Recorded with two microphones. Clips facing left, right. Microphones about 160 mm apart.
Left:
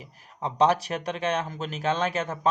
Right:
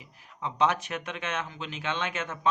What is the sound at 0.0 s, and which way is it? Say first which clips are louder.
Speech: left 4 dB; 40° left (ahead or behind).